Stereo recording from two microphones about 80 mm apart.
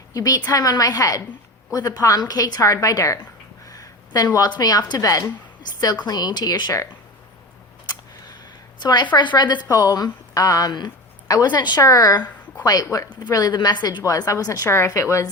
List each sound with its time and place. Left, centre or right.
0.1 s a woman's voice: left
3.7 s a sound: left
4.4 s a woman's voice: left
8.8 s a woman's voice: left
9.6 s speech: left
11.8 s a woman's voice: left
13.5 s a woman's voice: left
14.0 s a woman's voice: left